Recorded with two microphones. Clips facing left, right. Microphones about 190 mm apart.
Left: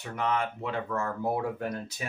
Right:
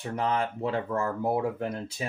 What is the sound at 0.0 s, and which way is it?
Speech, 35° right (ahead or behind).